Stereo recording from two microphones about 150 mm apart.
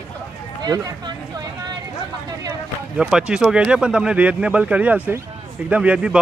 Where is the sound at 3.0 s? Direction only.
5° right (ahead or behind).